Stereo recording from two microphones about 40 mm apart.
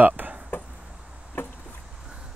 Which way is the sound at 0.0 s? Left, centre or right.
Right.